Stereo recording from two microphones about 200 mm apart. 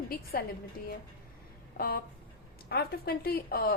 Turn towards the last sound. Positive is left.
turn(degrees=50)  # may be behind; listen again after turning